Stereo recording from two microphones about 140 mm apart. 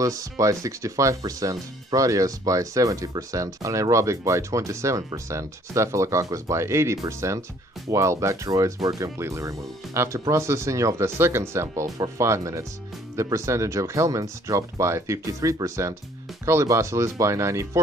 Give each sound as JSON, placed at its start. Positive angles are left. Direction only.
{"t": 0.0, "sound": "speech", "side_deg": -25}